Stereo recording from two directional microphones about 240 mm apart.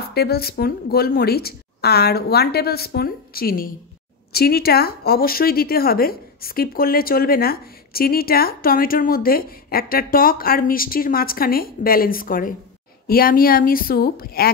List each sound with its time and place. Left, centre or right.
0.1 s speech: left